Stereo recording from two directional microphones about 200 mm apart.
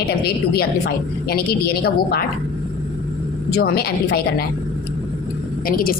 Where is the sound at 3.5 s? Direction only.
50° left (ahead or behind).